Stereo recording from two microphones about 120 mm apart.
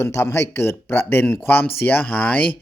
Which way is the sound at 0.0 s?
25° left (ahead or behind).